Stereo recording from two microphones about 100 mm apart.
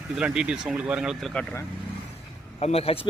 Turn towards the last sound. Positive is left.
turn(degrees=75)  # may be behind; listen again after turning